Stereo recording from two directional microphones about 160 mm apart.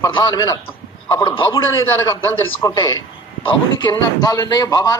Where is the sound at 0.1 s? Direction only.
25° left (ahead or behind).